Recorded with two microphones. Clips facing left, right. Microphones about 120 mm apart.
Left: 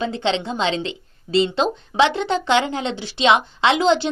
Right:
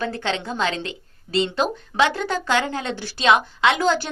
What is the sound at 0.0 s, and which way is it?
A woman's voice, 25° left (ahead or behind).